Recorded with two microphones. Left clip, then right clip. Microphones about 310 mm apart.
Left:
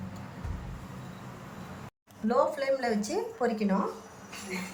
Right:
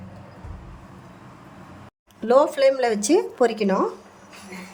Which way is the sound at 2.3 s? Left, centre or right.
Right.